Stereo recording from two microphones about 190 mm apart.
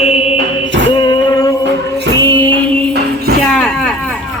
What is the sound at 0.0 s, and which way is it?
Chant, 30° left (ahead or behind).